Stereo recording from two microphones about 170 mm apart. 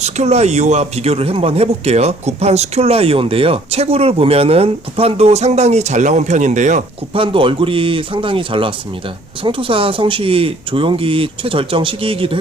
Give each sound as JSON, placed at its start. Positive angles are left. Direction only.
{"t": 0.0, "sound": "speech", "side_deg": -40}